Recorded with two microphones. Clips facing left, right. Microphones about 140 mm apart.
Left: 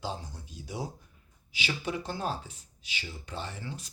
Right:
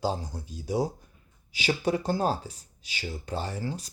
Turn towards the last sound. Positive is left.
turn(degrees=-35)  # may be behind; listen again after turning